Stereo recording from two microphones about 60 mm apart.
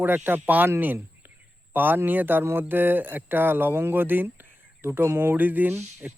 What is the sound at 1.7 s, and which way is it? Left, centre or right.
Speech, right.